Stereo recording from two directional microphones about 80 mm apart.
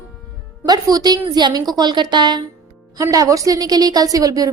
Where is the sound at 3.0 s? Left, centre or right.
Right.